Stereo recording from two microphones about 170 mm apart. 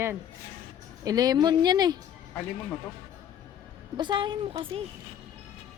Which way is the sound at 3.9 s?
25° right (ahead or behind).